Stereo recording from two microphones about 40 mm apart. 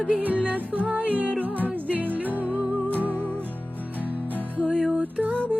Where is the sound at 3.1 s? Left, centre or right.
Left.